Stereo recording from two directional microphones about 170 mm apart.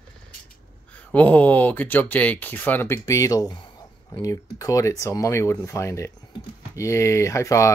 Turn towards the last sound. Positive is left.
turn(degrees=15)  # may be behind; listen again after turning